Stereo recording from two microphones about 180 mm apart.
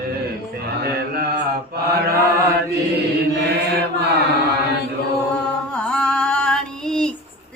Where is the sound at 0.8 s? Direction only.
60° right (ahead or behind).